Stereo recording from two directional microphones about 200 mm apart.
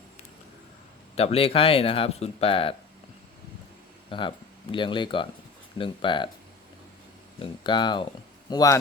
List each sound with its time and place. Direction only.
1.1 s speech: 30° left (ahead or behind)
4.1 s speech: 25° left (ahead or behind)
7.3 s speech: 25° left (ahead or behind)